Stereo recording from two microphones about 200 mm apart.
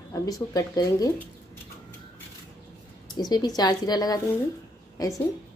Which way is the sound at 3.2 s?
20° left (ahead or behind).